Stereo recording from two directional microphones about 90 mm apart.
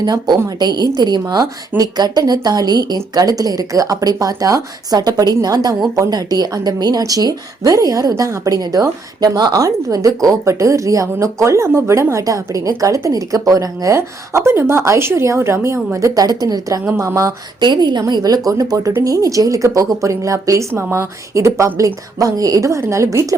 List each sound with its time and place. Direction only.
0.0 s a woman's voice: 50° right (ahead or behind)
17.6 s a woman's voice: 55° right (ahead or behind); by 23.0 s 35° right (ahead or behind)